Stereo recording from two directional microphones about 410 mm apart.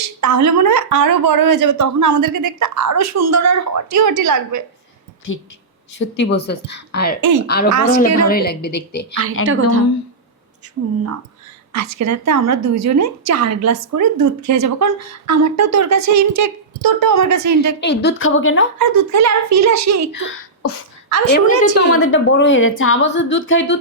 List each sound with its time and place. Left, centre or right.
0.0 s speech: right
6.0 s a woman's voice: left
7.2 s speech: right
7.4 s a woman's voice: left
7.7 s a woman's voice: right
8.2 s a woman's voice: left
9.5 s a woman's voice: right
11.7 s a woman's voice: right
17.7 s a woman's voice: left
18.8 s a woman's voice: right
20.1 s a woman's voice: left